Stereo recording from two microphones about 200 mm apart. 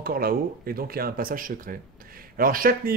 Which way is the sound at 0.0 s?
50° right (ahead or behind).